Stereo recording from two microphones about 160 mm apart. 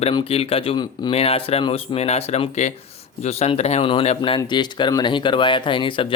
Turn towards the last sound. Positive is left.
turn(degrees=30)  # may be behind; listen again after turning